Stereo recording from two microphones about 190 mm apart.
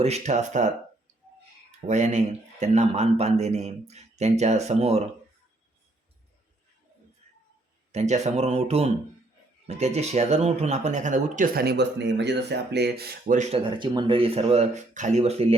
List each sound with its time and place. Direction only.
0.0 s speech: 35° right (ahead or behind)
1.9 s speech: 40° right (ahead or behind)
7.9 s speech: 35° right (ahead or behind)
13.7 s speech: 25° right (ahead or behind)